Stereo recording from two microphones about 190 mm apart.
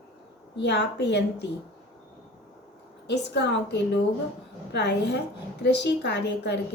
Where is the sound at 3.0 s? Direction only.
65° left (ahead or behind).